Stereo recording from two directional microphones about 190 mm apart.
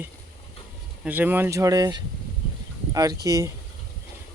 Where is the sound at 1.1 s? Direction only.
10° right (ahead or behind).